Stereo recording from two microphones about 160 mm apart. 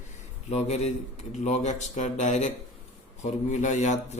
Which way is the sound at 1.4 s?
45° left (ahead or behind).